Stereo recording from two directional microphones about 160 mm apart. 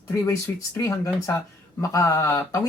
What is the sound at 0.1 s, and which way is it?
Speech, 15° left (ahead or behind).